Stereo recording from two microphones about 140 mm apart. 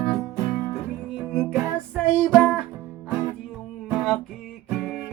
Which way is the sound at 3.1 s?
15° right (ahead or behind).